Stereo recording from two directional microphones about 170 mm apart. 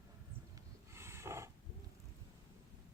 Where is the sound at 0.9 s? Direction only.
15° right (ahead or behind).